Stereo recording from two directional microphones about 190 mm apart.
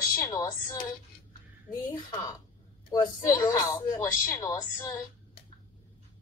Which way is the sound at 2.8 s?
15° left (ahead or behind).